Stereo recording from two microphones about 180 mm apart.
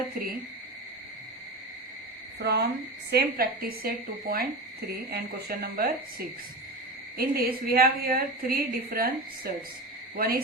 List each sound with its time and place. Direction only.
2.4 s a woman's voice: 60° right (ahead or behind)